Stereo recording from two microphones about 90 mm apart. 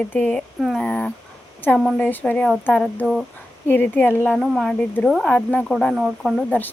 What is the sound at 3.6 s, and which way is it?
Speech, 20° left (ahead or behind).